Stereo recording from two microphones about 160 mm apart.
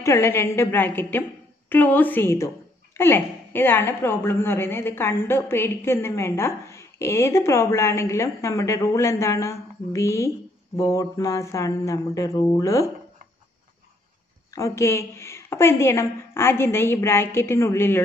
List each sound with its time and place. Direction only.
0.0 s a woman's voice: 15° left (ahead or behind)
14.5 s a woman's voice: 20° left (ahead or behind)